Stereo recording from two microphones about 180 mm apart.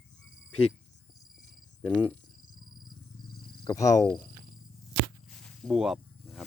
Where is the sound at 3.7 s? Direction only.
20° left (ahead or behind).